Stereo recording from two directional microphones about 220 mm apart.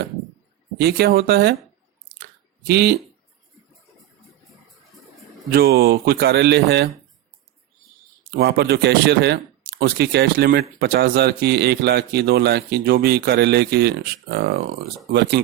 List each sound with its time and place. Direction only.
0.8 s a man's voice: 45° right (ahead or behind)
2.6 s a man's voice: 50° right (ahead or behind)
5.5 s a man's voice: 45° right (ahead or behind)
8.4 s a man's voice: 45° right (ahead or behind)